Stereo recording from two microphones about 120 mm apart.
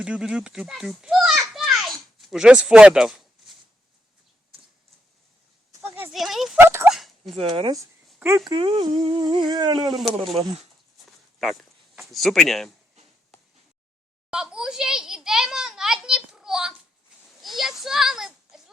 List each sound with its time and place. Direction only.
0.0 s children playing: 5° right (ahead or behind)
6.1 s a sound: centre (ahead or behind)
6.6 s dog: 20° right (ahead or behind)
7.3 s speech: 45° right (ahead or behind)
10.0 s speech: centre (ahead or behind)
14.3 s children playing: 5° right (ahead or behind)
17.4 s a sound: centre (ahead or behind)